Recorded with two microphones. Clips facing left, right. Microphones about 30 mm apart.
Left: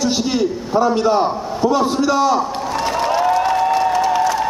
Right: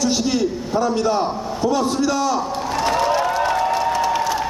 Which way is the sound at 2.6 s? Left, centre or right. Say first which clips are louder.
Even; centre.